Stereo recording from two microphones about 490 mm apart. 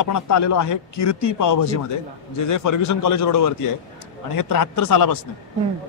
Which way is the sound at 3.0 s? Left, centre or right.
Left.